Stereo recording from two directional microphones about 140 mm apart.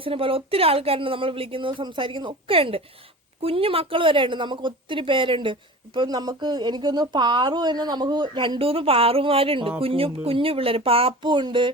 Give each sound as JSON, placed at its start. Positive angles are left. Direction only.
{"t": 0.0, "sound": "a woman's voice", "side_deg": -40}